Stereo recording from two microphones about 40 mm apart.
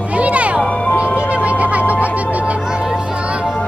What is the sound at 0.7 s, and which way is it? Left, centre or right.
Music, left.